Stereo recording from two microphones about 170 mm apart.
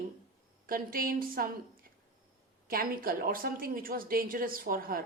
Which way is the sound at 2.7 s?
60° right (ahead or behind).